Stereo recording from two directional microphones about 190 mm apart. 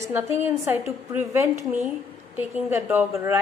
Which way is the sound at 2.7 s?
10° right (ahead or behind).